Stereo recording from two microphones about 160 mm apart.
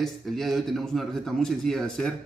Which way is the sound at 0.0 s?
Centre (ahead or behind).